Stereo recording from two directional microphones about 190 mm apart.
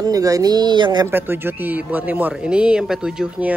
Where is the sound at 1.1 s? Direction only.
10° right (ahead or behind).